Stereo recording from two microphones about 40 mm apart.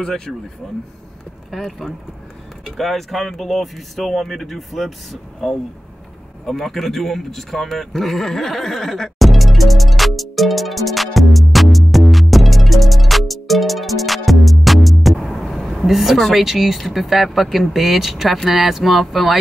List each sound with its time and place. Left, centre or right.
0.0 s speech: centre
1.5 s speech: centre
6.4 s speech: centre
9.2 s music: centre
16.2 s speech: centre
16.4 s speech: centre